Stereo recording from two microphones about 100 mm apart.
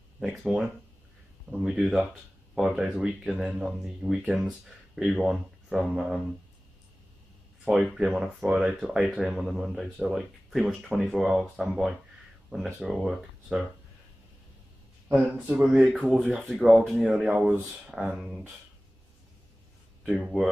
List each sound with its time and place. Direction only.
0.2 s speech: 5° right (ahead or behind)
1.5 s speech: 5° right (ahead or behind)
7.6 s speech: 10° right (ahead or behind)
12.5 s speech: 15° right (ahead or behind)
12.8 s speech: 5° right (ahead or behind)
15.0 s speech: 15° right (ahead or behind)
16.4 s speech: centre (ahead or behind)
20.2 s speech: 5° right (ahead or behind)